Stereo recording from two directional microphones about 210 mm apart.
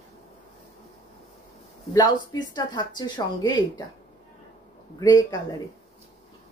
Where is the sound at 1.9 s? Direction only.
20° left (ahead or behind).